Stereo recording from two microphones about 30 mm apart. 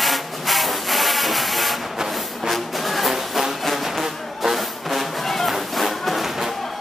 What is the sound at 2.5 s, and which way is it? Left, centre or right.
Music, centre.